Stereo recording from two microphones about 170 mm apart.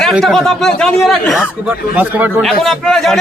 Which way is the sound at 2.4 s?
Centre (ahead or behind).